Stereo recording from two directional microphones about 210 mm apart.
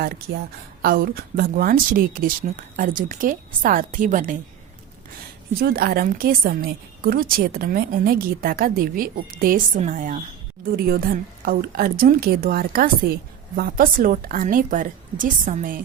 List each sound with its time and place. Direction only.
0.8 s a woman's voice: 45° right (ahead or behind)
5.5 s a woman's voice: 45° right (ahead or behind)